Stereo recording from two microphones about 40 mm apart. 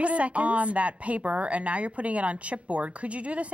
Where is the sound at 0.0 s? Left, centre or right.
Right.